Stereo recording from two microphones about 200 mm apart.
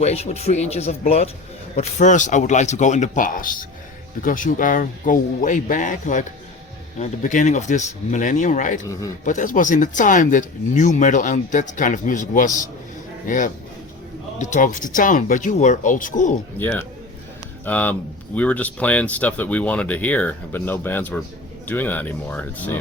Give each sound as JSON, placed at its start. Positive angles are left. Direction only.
{"t": 0.0, "sound": "speech", "side_deg": 35}
{"t": 16.6, "sound": "speech", "side_deg": 10}